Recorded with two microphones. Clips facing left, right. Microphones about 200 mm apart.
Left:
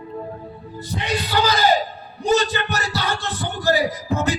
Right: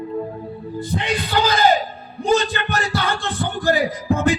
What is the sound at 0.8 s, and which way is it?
Music, 50° right (ahead or behind).